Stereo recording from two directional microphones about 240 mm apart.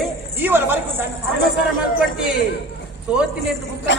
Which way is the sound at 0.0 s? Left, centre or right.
Centre.